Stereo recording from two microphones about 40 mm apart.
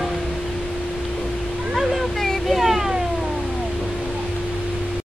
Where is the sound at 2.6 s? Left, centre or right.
Centre.